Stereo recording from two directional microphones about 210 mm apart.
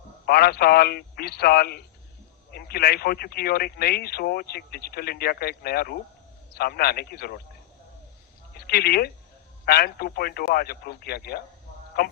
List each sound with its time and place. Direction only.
0.3 s speech: 45° left (ahead or behind)
8.5 s speech: 45° left (ahead or behind)